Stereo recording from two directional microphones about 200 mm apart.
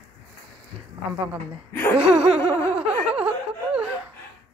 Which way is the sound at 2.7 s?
5° right (ahead or behind).